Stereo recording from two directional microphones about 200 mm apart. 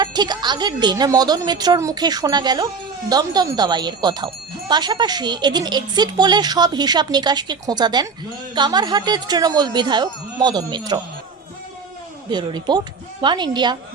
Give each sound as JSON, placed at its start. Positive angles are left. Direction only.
{"t": 0.0, "sound": "a woman's voice", "side_deg": -20}
{"t": 12.3, "sound": "a woman's voice", "side_deg": -20}